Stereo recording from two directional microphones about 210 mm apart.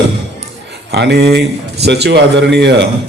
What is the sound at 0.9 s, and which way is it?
A man's voice, 50° right (ahead or behind).